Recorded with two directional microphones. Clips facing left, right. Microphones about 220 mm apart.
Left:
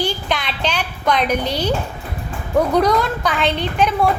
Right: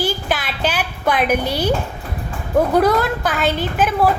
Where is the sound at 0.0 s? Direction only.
5° right (ahead or behind).